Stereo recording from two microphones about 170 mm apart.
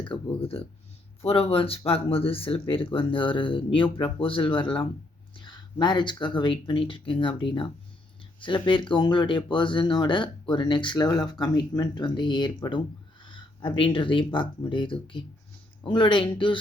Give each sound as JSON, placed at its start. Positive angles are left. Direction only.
{"t": 0.0, "sound": "speech", "side_deg": 30}